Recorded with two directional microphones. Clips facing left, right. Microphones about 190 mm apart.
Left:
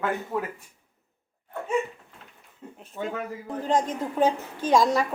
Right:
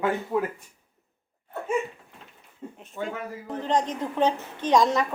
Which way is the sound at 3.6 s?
5° left (ahead or behind).